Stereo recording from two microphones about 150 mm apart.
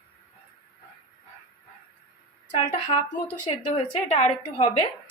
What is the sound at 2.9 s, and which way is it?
A woman's voice, 40° left (ahead or behind).